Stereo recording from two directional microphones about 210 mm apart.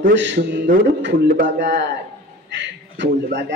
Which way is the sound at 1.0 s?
55° right (ahead or behind).